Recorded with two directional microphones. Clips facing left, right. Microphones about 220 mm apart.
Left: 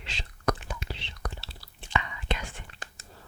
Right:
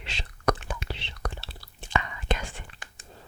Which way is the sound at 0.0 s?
70° right (ahead or behind).